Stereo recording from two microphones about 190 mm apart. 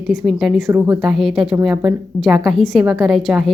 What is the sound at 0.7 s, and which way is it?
Speech, 15° right (ahead or behind).